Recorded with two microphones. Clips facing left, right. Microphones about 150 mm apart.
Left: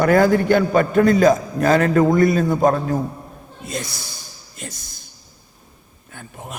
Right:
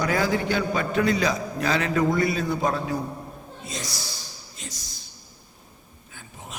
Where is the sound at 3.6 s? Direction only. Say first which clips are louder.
Left 6 dB; 55° left (ahead or behind).